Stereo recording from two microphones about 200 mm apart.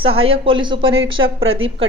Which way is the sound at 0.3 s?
25° right (ahead or behind).